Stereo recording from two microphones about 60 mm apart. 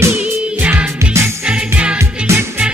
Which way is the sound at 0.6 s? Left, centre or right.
Right.